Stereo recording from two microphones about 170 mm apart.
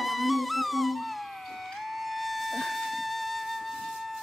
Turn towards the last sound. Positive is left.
turn(degrees=0)  # may be behind; listen again after turning